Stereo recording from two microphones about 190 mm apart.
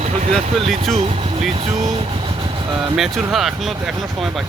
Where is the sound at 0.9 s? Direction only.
35° right (ahead or behind).